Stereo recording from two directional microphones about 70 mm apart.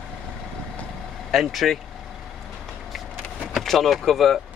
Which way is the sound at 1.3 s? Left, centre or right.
Centre.